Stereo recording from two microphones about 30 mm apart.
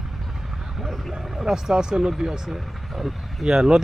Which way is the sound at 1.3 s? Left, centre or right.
Centre.